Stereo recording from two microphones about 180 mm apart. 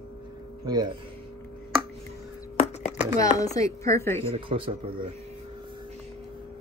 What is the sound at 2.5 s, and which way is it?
Chopping, 40° left (ahead or behind).